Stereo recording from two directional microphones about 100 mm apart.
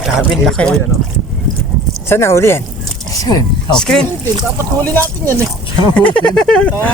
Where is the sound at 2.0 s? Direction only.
25° left (ahead or behind).